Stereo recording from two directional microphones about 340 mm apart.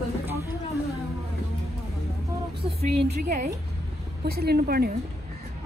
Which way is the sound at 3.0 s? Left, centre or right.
Right.